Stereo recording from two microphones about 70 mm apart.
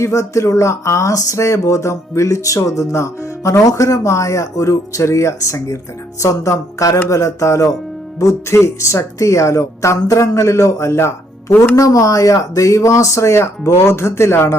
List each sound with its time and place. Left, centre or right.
0.0 s speech: left
3.6 s speech: left
11.8 s speech: left